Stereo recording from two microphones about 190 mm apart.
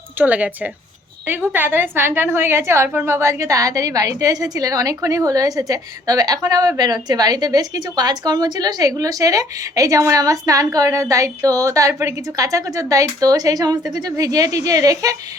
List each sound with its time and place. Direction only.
0.2 s a woman's voice: 5° right (ahead or behind)